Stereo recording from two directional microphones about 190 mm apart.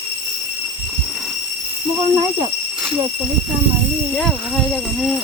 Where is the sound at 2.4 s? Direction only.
30° right (ahead or behind).